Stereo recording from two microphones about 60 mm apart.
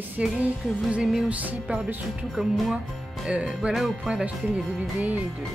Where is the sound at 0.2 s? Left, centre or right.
Centre.